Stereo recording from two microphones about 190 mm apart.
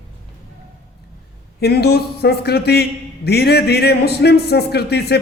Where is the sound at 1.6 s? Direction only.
60° left (ahead or behind).